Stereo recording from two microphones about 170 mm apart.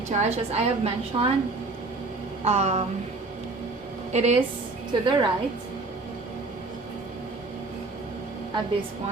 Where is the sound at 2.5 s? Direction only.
40° right (ahead or behind).